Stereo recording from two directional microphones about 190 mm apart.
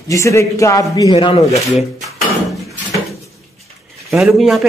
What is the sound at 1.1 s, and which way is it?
Speech, 35° left (ahead or behind).